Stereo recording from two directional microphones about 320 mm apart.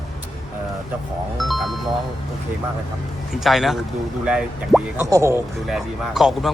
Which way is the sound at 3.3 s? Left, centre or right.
Centre.